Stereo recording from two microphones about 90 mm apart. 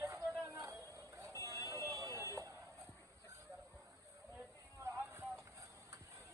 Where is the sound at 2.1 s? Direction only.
35° left (ahead or behind).